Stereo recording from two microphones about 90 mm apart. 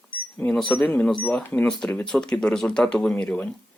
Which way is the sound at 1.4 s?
15° left (ahead or behind).